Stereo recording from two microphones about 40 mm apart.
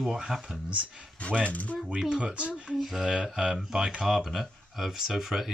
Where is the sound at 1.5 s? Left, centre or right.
Left.